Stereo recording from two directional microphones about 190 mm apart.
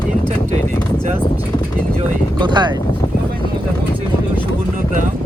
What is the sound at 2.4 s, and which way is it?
Speech, 25° right (ahead or behind).